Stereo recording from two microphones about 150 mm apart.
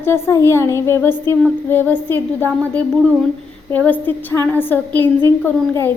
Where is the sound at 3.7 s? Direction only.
10° left (ahead or behind).